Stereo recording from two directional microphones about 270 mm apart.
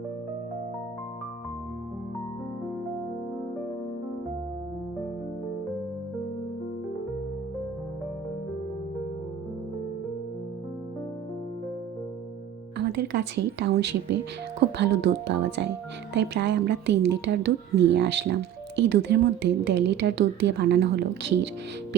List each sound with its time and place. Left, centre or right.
12.7 s speech: right